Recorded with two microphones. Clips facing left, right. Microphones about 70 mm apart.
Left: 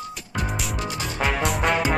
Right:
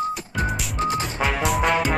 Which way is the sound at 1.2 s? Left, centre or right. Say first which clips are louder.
Even; centre.